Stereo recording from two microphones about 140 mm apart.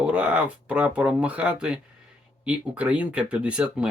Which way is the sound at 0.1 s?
10° right (ahead or behind).